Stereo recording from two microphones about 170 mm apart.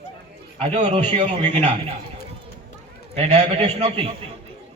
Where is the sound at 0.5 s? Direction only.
35° right (ahead or behind).